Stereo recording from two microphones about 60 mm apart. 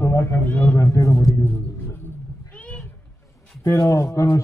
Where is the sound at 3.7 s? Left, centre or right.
Left.